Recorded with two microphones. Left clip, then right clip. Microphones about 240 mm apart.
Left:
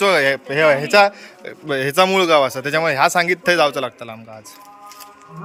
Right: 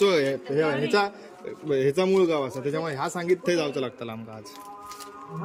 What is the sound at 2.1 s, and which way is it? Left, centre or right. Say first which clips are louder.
Speech: left 9 dB; left.